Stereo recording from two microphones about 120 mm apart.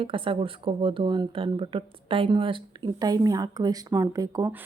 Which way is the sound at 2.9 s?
30° right (ahead or behind).